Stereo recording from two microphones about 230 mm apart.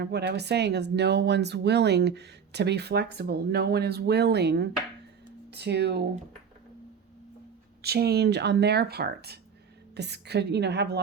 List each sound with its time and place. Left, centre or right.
0.0 s speech: right
7.8 s speech: right